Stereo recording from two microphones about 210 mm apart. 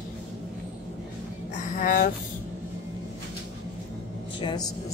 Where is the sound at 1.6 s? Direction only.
40° left (ahead or behind).